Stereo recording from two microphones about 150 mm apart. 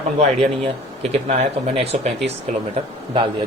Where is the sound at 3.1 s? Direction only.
30° right (ahead or behind).